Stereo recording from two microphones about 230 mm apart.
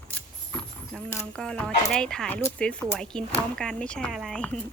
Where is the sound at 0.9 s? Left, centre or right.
Centre.